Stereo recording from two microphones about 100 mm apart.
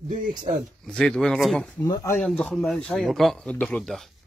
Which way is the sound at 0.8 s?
10° left (ahead or behind).